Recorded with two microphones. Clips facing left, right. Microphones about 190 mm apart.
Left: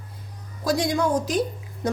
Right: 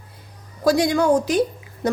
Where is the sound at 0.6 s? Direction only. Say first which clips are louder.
Right 6 dB; 70° right (ahead or behind).